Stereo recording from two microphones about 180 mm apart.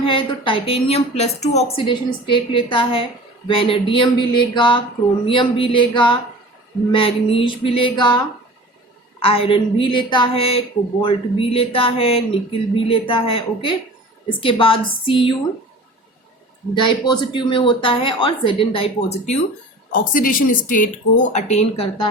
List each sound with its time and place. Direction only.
0.0 s a woman's voice: 30° left (ahead or behind)
9.2 s a woman's voice: 30° left (ahead or behind)
16.7 s a woman's voice: 25° left (ahead or behind)
19.9 s a woman's voice: 50° left (ahead or behind); by 22.1 s 30° left (ahead or behind)